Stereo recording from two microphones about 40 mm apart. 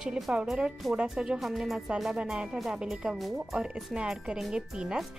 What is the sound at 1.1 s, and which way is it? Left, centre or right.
Speech, centre.